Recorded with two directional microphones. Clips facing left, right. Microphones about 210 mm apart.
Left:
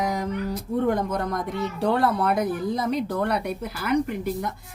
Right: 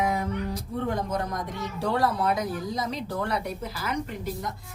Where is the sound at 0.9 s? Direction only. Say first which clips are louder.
Left 4 dB; 55° left (ahead or behind).